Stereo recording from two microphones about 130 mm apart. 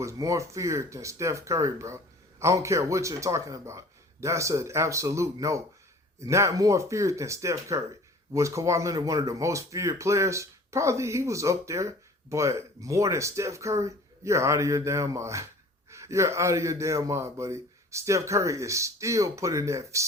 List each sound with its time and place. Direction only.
0.0 s speech: 25° right (ahead or behind)